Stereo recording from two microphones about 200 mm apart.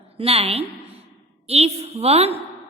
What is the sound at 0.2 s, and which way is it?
A woman's voice, 30° right (ahead or behind).